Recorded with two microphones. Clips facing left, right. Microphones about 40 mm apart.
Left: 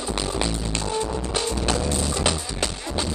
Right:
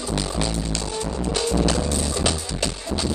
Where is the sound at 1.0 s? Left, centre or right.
Left.